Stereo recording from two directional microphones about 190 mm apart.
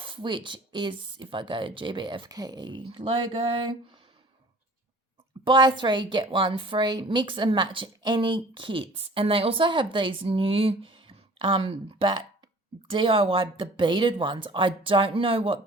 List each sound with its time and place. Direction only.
0.0 s a woman's voice: 25° right (ahead or behind)
5.5 s a woman's voice: 25° right (ahead or behind)